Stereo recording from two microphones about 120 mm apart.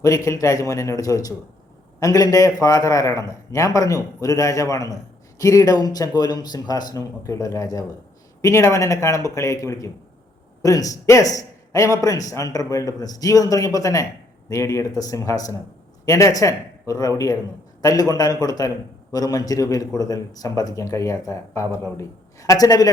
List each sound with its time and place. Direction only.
0.0 s a man's voice: 25° left (ahead or behind)